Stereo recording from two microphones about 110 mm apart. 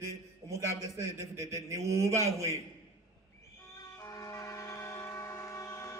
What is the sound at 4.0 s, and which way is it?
Vehicle, 25° left (ahead or behind).